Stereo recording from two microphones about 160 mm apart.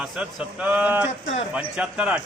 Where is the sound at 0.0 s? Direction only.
5° right (ahead or behind).